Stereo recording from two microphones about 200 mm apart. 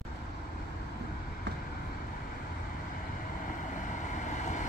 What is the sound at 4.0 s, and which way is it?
Vehicle, 40° left (ahead or behind).